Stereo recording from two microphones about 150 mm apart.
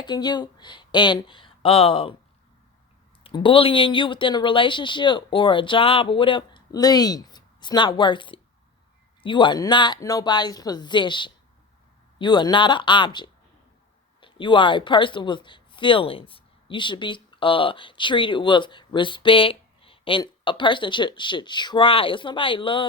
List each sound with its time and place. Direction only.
0.0 s speech: 30° left (ahead or behind)
3.2 s a woman's voice: 35° left (ahead or behind)